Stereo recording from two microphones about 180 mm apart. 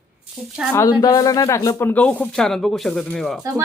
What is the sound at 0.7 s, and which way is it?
Speech, 15° left (ahead or behind).